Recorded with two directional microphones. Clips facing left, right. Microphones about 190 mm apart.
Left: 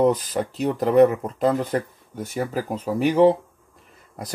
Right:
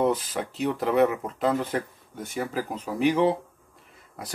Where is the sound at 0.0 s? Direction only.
35° left (ahead or behind).